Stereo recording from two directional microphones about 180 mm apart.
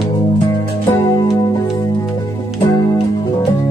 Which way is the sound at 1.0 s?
20° left (ahead or behind).